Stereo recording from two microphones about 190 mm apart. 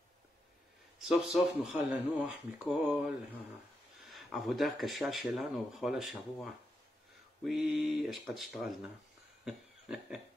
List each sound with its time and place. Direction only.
1.0 s speech: centre (ahead or behind)
4.0 s speech: centre (ahead or behind)
9.4 s a sound: centre (ahead or behind)